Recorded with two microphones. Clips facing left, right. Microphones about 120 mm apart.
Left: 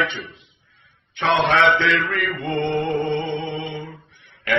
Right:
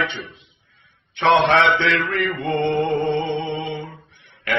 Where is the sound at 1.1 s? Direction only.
20° right (ahead or behind).